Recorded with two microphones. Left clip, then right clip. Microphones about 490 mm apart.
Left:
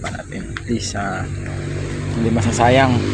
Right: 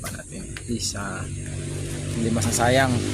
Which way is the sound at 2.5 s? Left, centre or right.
Right.